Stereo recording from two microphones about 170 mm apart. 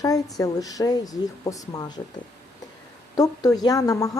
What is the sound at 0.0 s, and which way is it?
Speech, 20° left (ahead or behind).